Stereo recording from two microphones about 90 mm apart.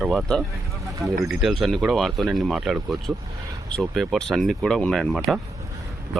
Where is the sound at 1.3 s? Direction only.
Centre (ahead or behind).